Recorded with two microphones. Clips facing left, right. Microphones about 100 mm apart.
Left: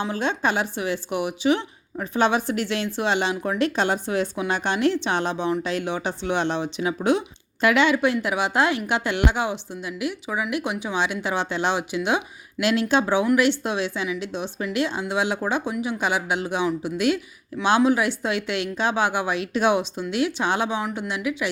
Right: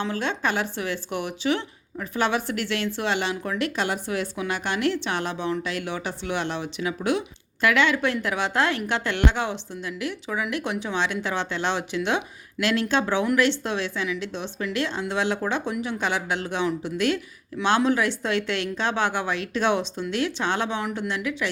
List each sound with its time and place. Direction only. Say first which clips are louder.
0.0 s speech: left 2 dB; 20° left (ahead or behind)